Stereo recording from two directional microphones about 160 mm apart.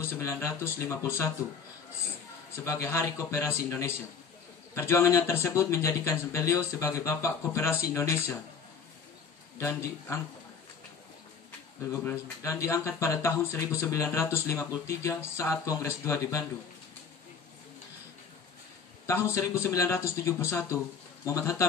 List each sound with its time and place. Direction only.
0.0 s speech: 20° left (ahead or behind)
2.5 s speech: 20° left (ahead or behind)
9.6 s speech: 20° left (ahead or behind)
11.9 s speech: 15° left (ahead or behind)
19.3 s speech: 15° left (ahead or behind)